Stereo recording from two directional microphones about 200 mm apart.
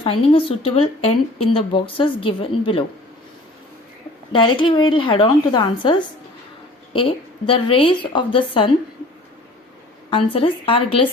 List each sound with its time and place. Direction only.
0.0 s a woman's voice: 25° left (ahead or behind)
4.4 s a woman's voice: 25° left (ahead or behind)
10.1 s a woman's voice: 25° left (ahead or behind)